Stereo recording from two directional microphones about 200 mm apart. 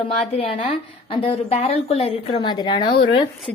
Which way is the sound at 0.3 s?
30° left (ahead or behind).